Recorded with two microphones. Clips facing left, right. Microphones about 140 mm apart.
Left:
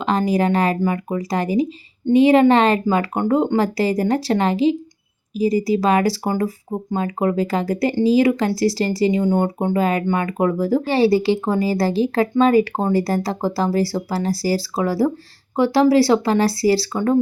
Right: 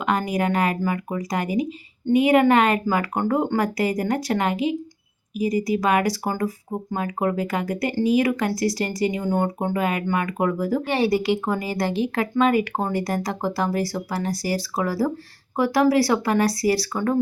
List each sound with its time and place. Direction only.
0.0 s speech: 30° left (ahead or behind)